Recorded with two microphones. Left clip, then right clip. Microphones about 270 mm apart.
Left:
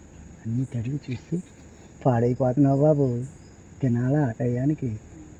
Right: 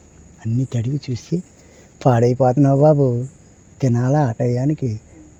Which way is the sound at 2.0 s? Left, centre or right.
Right.